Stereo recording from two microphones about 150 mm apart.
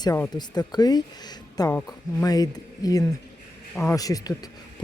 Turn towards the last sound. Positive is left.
turn(degrees=25)  # may be behind; listen again after turning